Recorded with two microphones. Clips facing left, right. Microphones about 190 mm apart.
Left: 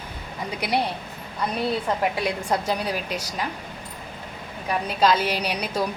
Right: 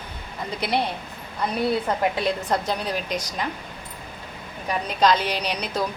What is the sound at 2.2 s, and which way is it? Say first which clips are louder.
A woman's voice: right 1 dB; 10° left (ahead or behind).